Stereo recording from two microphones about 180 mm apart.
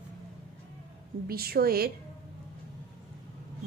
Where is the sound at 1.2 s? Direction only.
55° right (ahead or behind).